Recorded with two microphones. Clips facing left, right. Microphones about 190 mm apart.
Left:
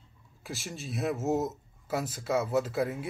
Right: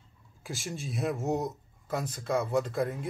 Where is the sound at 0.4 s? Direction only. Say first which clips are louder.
Right 2 dB; centre (ahead or behind).